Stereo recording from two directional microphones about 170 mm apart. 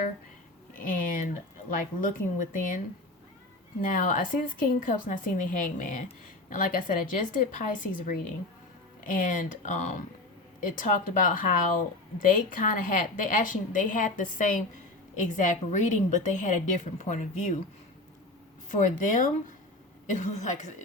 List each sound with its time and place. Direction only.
0.8 s a woman's voice: 55° left (ahead or behind)
18.7 s a woman's voice: 50° left (ahead or behind)